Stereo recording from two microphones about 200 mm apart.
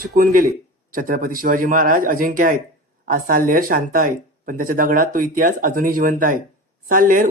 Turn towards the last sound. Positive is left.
turn(degrees=-45)  # may be behind; listen again after turning